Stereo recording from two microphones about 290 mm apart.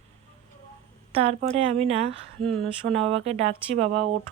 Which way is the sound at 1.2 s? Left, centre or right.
Right.